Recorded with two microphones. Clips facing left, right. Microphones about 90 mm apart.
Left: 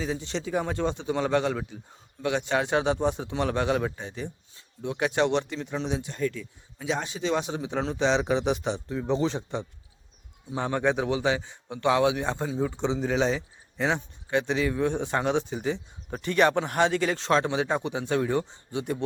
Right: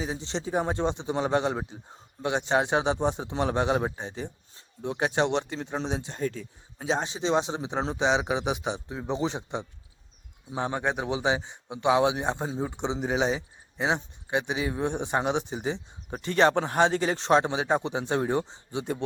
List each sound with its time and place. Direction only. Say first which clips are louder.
0.0 s a man's voice: left 1 dB; 25° right (ahead or behind); by 11.1 s 5° right (ahead or behind)
11.1 s a man's voice: left 1 dB; 20° right (ahead or behind)